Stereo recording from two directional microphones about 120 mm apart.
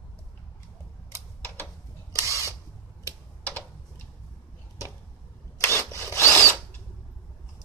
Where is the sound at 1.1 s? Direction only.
15° left (ahead or behind).